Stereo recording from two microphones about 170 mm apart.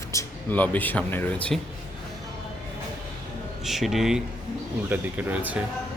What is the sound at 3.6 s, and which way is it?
Speech, centre (ahead or behind).